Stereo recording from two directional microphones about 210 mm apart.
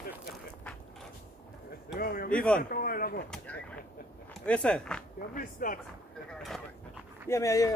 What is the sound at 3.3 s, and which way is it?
Speech, 5° left (ahead or behind).